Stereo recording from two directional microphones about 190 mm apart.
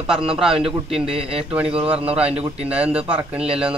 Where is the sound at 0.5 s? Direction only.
30° right (ahead or behind).